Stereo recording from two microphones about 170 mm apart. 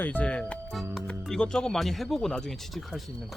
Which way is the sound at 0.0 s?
10° left (ahead or behind).